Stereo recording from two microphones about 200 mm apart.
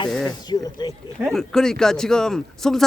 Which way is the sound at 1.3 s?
Centre (ahead or behind).